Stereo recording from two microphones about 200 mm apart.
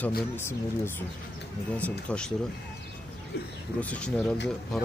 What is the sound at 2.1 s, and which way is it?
Speech, 5° left (ahead or behind).